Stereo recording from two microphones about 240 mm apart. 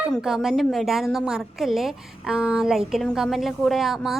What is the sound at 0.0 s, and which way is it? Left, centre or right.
A woman's voice, centre.